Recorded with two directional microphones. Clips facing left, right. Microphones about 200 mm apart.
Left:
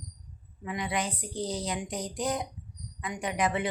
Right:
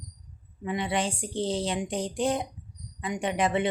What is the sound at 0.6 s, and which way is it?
Speech, 25° right (ahead or behind).